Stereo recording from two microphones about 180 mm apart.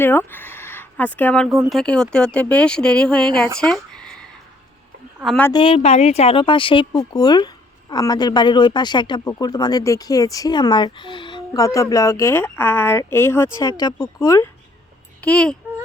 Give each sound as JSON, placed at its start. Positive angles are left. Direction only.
{"t": 0.0, "sound": "speech", "side_deg": 10}
{"t": 3.6, "sound": "a sound", "side_deg": 5}
{"t": 5.2, "sound": "speech", "side_deg": 0}
{"t": 5.5, "sound": "speech", "side_deg": 25}
{"t": 15.2, "sound": "speech", "side_deg": 5}